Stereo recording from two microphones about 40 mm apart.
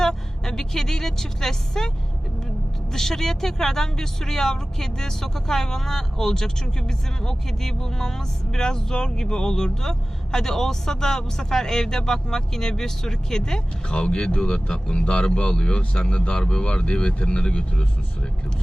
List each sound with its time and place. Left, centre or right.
0.0 s a woman's voice: centre
2.9 s speech: centre
13.9 s speech: left